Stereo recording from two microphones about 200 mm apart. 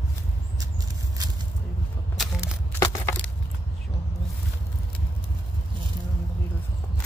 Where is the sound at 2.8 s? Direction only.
15° left (ahead or behind).